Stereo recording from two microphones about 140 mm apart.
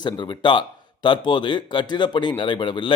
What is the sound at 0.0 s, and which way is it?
Speech, 35° left (ahead or behind).